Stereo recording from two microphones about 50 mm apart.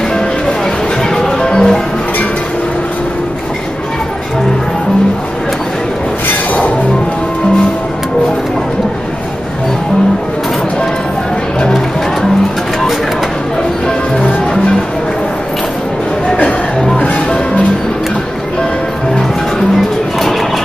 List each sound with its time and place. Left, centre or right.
1.1 s music: centre
13.8 s music: centre
16.4 s music: centre